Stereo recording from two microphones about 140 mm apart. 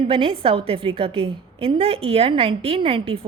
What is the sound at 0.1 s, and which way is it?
A woman's voice, 40° right (ahead or behind).